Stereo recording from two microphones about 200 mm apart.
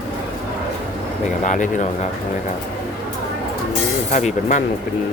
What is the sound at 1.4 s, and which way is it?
Speech, 40° left (ahead or behind).